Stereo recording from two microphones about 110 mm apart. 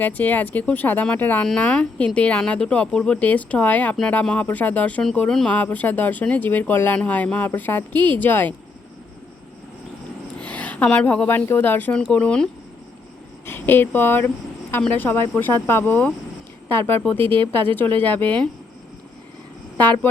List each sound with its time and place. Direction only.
0.0 s speech: 15° left (ahead or behind)
10.4 s a woman's voice: 10° left (ahead or behind)
13.4 s speech: 20° left (ahead or behind)